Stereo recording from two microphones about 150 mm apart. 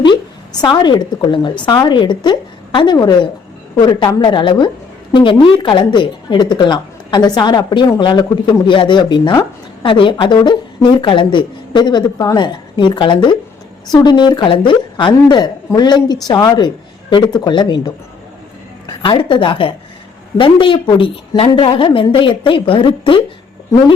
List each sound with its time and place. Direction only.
0.6 s a woman's voice: 30° left (ahead or behind)